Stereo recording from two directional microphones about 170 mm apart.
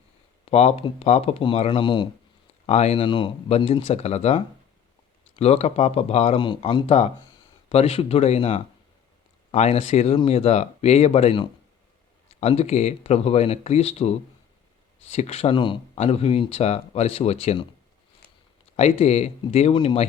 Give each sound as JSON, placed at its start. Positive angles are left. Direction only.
{"t": 0.4, "sound": "speech", "side_deg": 35}
{"t": 1.8, "sound": "speech", "side_deg": 30}
{"t": 2.6, "sound": "speech", "side_deg": 40}
{"t": 18.8, "sound": "speech", "side_deg": 40}